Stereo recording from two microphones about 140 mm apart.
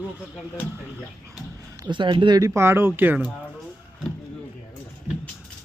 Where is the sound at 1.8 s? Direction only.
35° right (ahead or behind); by 3.3 s 10° right (ahead or behind).